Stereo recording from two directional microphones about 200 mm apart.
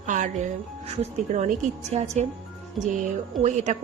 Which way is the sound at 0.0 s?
40° right (ahead or behind).